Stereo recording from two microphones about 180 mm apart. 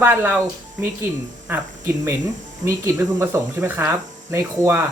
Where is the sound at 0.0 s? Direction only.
10° right (ahead or behind).